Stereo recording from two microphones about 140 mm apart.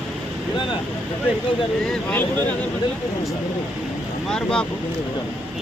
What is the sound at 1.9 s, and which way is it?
Speech, 5° left (ahead or behind).